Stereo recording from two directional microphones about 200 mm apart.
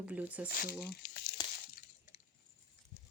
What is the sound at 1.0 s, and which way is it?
Crumpling, 50° left (ahead or behind).